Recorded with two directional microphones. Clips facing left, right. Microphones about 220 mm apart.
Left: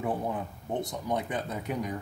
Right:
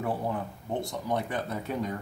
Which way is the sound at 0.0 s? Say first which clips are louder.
Even; 20° left (ahead or behind).